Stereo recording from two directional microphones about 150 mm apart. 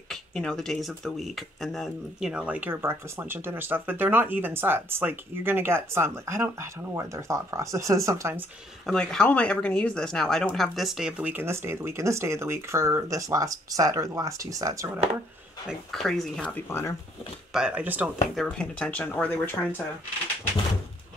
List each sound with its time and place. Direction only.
0.1 s speech: 5° left (ahead or behind); by 8.5 s 20° right (ahead or behind)
8.8 s speech: 5° left (ahead or behind); by 14.9 s 20° right (ahead or behind)
15.6 s speech: centre (ahead or behind)
17.5 s speech: 5° right (ahead or behind)
18.3 s speech: 5° left (ahead or behind)